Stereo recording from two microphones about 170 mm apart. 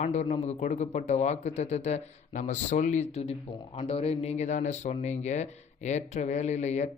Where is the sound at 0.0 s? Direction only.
40° left (ahead or behind).